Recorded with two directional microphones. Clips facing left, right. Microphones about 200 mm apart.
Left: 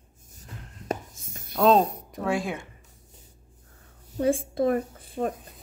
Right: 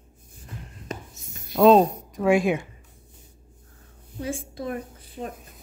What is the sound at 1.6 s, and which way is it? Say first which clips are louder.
Speech: right 4 dB; 5° right (ahead or behind).